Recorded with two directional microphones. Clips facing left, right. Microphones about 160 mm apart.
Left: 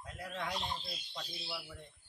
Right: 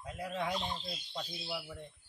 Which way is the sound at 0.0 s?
15° right (ahead or behind).